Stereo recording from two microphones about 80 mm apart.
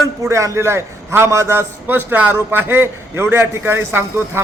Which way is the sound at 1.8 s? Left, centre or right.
Right.